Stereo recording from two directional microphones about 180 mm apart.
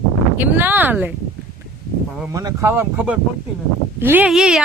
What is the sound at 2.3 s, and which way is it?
Speech, 20° right (ahead or behind).